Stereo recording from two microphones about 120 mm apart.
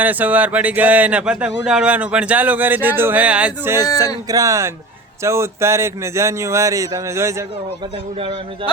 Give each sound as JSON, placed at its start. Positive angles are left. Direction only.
{"t": 0.0, "sound": "speech", "side_deg": -15}
{"t": 3.8, "sound": "speech", "side_deg": 30}
{"t": 4.3, "sound": "speech", "side_deg": -30}